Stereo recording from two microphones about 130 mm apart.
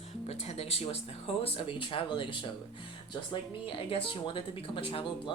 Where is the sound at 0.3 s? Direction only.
55° left (ahead or behind).